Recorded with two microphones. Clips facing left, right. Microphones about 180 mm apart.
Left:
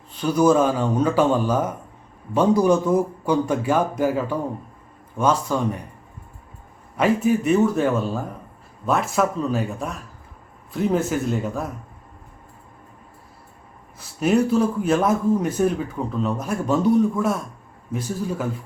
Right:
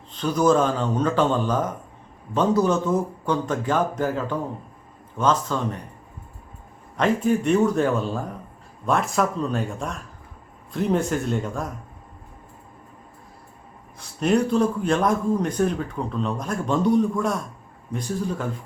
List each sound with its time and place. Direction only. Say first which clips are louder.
0.1 s a man's voice: left 2 dB; 10° left (ahead or behind)
6.9 s speech: left 2 dB; 5° left (ahead or behind)
14.0 s speech: left 2 dB; 5° left (ahead or behind)